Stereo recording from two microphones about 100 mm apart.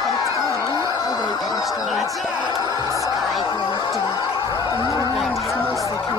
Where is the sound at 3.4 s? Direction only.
50° left (ahead or behind).